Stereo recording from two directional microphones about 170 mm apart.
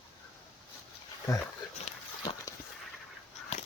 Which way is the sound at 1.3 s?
20° left (ahead or behind).